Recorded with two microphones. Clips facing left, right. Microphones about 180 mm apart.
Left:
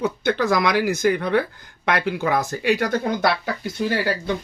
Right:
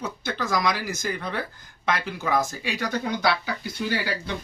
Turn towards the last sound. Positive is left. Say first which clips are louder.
# left 6 dB
turn(degrees=50)  # may be behind; listen again after turning